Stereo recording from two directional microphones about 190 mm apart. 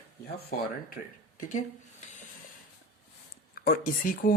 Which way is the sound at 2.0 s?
40° left (ahead or behind).